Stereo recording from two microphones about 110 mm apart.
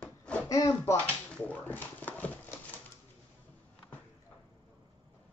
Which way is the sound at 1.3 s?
15° left (ahead or behind).